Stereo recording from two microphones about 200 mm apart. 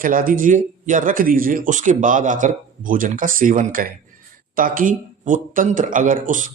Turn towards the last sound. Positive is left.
turn(degrees=-40)  # may be behind; listen again after turning